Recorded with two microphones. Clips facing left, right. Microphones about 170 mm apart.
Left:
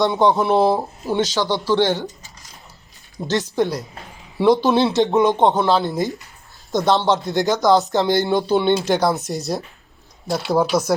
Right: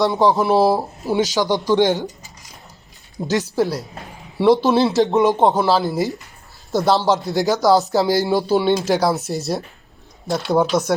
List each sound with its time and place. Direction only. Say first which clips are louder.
0.0 s speech: even; centre (ahead or behind); by 2.1 s 15° right (ahead or behind)
3.2 s speech: right 1 dB; 10° right (ahead or behind)